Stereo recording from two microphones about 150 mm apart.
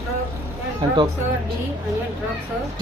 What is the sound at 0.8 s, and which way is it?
Speech, 30° right (ahead or behind).